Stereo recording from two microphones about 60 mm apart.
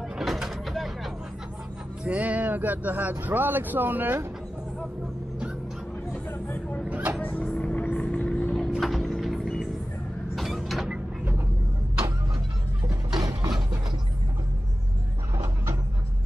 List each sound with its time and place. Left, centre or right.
0.2 s vehicle: centre
2.0 s speech: right
6.3 s vehicle: left
6.9 s a sound: right
7.2 s vehicle: left
8.7 s music: centre
10.3 s mechanisms: centre
12.8 s a sound: right
15.3 s a sound: right